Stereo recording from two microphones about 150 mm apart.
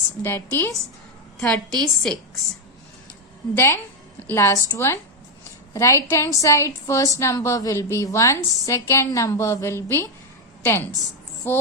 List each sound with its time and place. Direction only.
0.2 s a woman's voice: 15° left (ahead or behind)
1.4 s a woman's voice: 5° left (ahead or behind)
3.5 s a woman's voice: 15° left (ahead or behind)